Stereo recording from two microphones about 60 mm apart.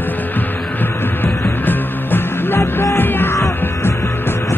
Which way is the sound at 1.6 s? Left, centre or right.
Left.